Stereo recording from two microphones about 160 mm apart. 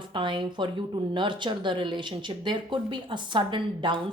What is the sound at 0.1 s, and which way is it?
Speech, 30° right (ahead or behind).